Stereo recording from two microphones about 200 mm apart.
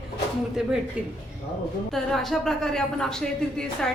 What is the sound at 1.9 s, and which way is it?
A woman's voice, centre (ahead or behind).